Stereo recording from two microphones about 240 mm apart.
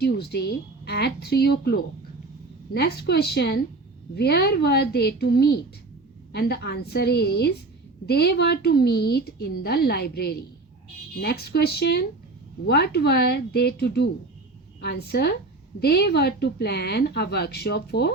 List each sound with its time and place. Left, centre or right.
0.0 s a woman's voice: left